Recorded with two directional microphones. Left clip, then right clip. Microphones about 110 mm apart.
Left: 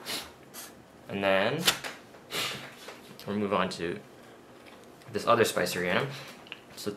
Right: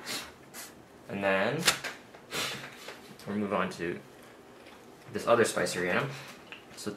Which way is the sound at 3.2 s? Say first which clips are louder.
Left 3 dB; 30° left (ahead or behind).